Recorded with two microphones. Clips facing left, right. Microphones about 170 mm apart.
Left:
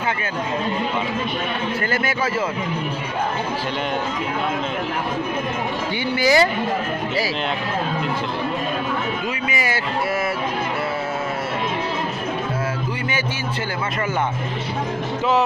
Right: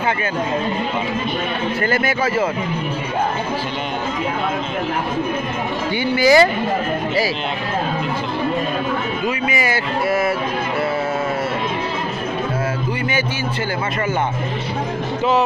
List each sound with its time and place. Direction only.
1.8 s a man's voice: 65° right (ahead or behind)
6.1 s speech: 90° right